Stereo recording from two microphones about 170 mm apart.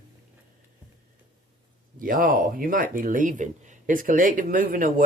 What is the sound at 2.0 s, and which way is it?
Speech, 55° right (ahead or behind).